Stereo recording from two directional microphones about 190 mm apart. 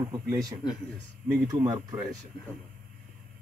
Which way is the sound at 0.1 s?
15° right (ahead or behind).